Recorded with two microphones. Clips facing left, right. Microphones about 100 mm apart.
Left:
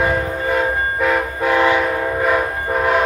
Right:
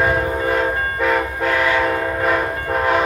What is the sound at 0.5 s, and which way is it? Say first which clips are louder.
Train: left 1 dB; centre (ahead or behind).